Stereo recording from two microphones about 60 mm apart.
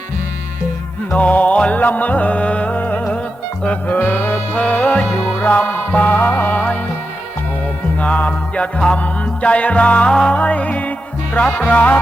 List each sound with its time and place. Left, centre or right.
1.1 s music: left
8.0 s music: left